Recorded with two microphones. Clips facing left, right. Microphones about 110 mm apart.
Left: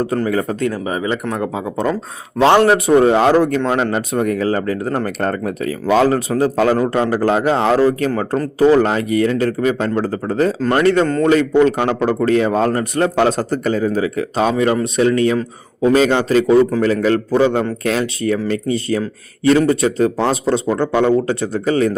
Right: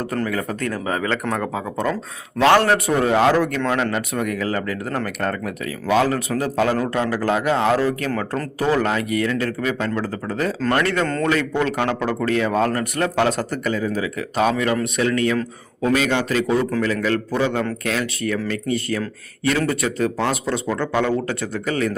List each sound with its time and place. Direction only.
0.0 s a man's voice: 25° left (ahead or behind)
0.7 s speech: 10° left (ahead or behind)
3.0 s a man's voice: 30° left (ahead or behind)
11.0 s speech: 15° left (ahead or behind)
11.3 s a man's voice: 30° left (ahead or behind)